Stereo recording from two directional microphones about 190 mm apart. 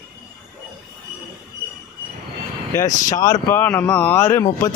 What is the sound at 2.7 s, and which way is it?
Speech, 15° left (ahead or behind).